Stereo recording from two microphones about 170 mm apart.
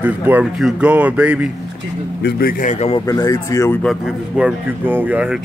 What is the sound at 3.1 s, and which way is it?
Speech, 20° left (ahead or behind).